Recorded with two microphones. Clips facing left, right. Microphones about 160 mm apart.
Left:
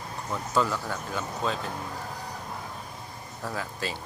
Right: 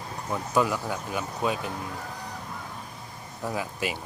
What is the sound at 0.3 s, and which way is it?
Speech, 15° right (ahead or behind).